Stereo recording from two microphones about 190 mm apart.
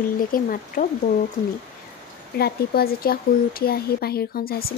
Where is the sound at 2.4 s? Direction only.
55° left (ahead or behind).